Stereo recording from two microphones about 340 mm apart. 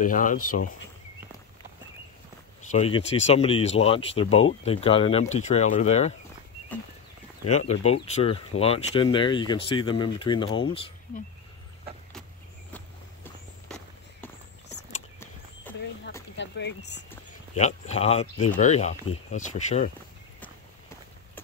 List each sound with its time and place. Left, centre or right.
0.0 s speech: left
2.7 s speech: centre
7.4 s speech: centre
12.7 s walk: centre
15.1 s walk: centre
16.3 s speech: left
17.6 s speech: centre